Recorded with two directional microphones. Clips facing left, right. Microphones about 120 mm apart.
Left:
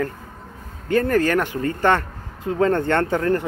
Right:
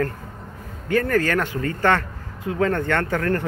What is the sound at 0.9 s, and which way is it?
Speech, 25° left (ahead or behind).